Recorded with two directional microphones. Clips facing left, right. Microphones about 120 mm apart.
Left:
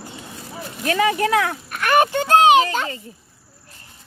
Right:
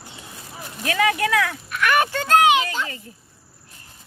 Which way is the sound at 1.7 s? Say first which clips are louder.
Left 3 dB; 35° left (ahead or behind).